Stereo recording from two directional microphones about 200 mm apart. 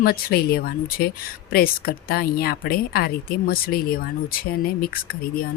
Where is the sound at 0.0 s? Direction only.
50° left (ahead or behind).